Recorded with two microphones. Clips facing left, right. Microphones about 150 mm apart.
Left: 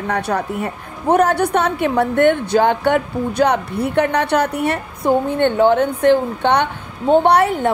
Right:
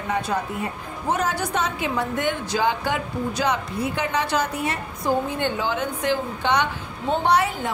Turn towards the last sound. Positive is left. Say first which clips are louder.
# left 7 dB
turn(degrees=60)  # may be behind; listen again after turning